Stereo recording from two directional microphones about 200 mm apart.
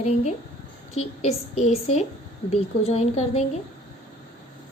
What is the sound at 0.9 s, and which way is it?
A woman's voice, 30° left (ahead or behind).